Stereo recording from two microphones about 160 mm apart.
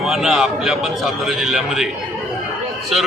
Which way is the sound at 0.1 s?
Centre (ahead or behind).